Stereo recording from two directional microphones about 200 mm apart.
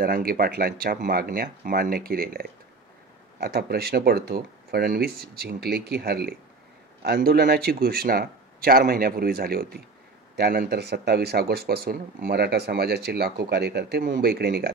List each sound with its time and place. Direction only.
0.0 s speech: 50° right (ahead or behind)